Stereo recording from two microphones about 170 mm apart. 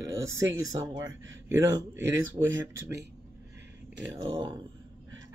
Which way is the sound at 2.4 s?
25° right (ahead or behind).